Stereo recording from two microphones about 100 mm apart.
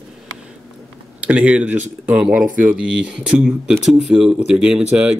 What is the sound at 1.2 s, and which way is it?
Speech, 15° right (ahead or behind).